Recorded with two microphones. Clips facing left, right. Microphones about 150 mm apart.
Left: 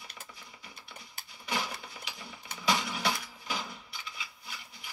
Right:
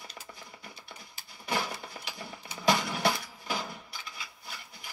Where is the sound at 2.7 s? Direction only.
45° right (ahead or behind).